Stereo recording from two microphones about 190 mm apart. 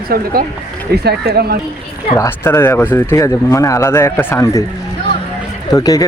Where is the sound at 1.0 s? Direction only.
55° right (ahead or behind).